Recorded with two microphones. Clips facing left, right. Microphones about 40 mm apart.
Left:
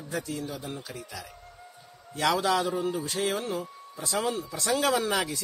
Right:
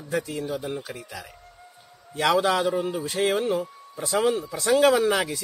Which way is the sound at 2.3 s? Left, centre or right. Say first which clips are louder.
Right 4 dB; centre.